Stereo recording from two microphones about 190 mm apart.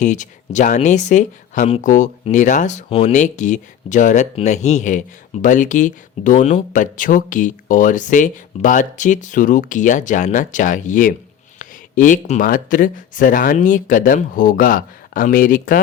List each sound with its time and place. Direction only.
0.0 s speech: 40° left (ahead or behind)